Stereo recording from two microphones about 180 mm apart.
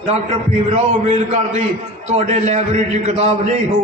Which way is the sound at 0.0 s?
40° right (ahead or behind).